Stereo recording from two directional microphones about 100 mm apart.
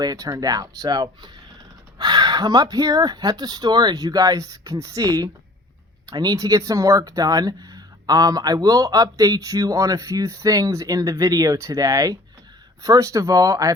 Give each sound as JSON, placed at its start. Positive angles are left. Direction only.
{"t": 0.0, "sound": "speech", "side_deg": -40}